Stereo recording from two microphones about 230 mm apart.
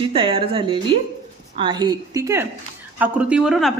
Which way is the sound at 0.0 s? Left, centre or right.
Right.